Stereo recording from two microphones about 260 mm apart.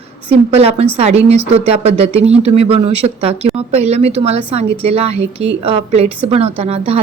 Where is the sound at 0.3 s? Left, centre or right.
Right.